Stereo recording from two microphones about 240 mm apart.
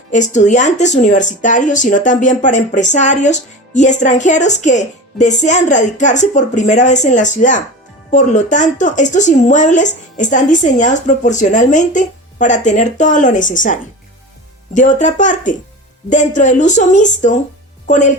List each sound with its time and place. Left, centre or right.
0.1 s a woman's voice: left